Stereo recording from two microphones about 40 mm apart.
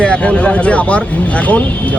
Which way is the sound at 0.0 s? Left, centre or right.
Left.